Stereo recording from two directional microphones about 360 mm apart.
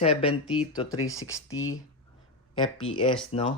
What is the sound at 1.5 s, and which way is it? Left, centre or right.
Speech, left.